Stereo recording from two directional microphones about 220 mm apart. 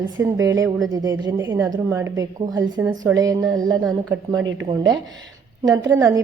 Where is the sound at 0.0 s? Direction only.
15° right (ahead or behind).